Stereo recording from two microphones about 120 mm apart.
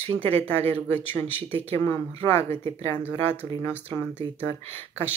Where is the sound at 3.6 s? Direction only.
20° left (ahead or behind).